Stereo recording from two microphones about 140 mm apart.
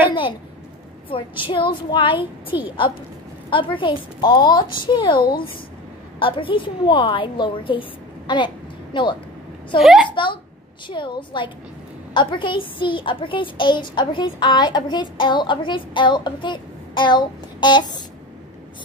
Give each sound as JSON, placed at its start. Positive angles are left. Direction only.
{"t": 1.1, "sound": "a woman's voice", "side_deg": 35}
{"t": 6.1, "sound": "a woman's voice", "side_deg": 40}
{"t": 8.9, "sound": "a woman's voice", "side_deg": 30}
{"t": 9.8, "sound": "a woman's voice", "side_deg": 0}
{"t": 10.0, "sound": "a woman's voice", "side_deg": 35}